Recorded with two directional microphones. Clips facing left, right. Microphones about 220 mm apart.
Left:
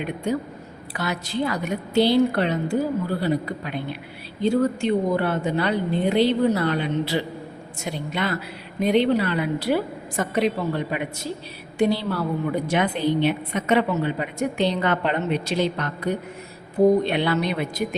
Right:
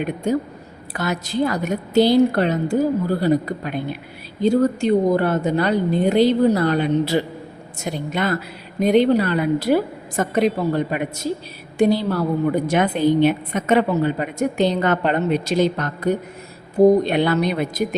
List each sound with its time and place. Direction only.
0.3 s a woman's voice: 45° right (ahead or behind)